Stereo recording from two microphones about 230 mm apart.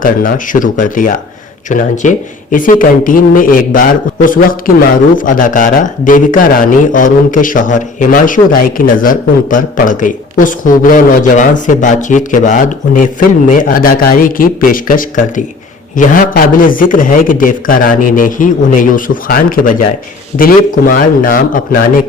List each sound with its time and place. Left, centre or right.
0.0 s speech: left